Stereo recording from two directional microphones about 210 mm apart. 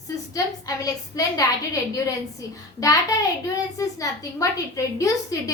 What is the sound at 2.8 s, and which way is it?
A woman's voice, 15° left (ahead or behind).